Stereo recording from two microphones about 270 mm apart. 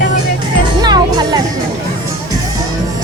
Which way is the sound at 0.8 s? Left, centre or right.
Centre.